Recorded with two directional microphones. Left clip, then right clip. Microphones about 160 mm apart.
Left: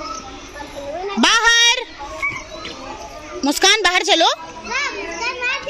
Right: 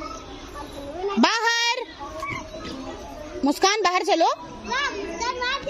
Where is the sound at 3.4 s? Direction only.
5° right (ahead or behind).